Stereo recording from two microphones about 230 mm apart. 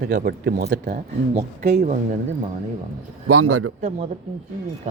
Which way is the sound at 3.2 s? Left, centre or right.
Right.